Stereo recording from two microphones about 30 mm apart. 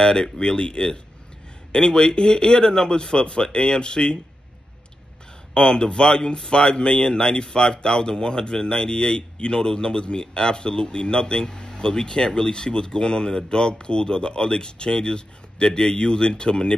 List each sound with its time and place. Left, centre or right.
0.0 s speech: left
5.5 s speech: left